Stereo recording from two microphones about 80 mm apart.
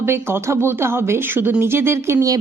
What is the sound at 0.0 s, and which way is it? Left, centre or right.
Speech, right.